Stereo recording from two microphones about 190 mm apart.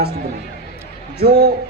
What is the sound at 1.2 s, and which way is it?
Speech, 55° right (ahead or behind).